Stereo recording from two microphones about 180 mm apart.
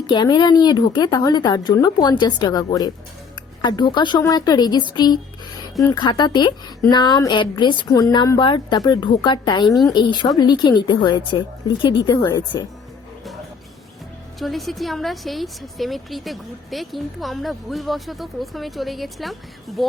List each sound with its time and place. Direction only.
0.1 s speech: 25° left (ahead or behind)
14.3 s a woman's voice: centre (ahead or behind)